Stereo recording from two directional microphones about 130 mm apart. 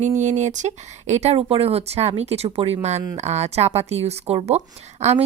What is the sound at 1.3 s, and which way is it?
A woman's voice, 45° right (ahead or behind).